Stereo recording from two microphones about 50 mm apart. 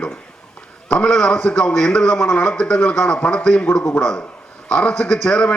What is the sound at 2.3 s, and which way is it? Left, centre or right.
A man's voice, left.